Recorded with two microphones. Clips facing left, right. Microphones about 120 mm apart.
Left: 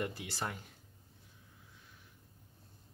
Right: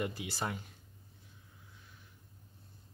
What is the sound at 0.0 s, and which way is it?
Speech, 5° right (ahead or behind).